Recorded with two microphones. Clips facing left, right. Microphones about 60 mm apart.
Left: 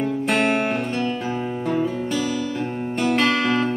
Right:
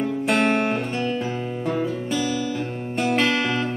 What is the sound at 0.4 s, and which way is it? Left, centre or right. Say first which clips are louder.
Music: even; centre.